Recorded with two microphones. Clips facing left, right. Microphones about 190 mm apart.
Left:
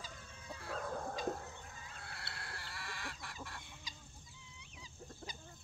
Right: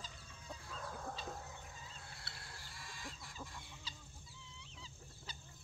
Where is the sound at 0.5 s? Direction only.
70° left (ahead or behind).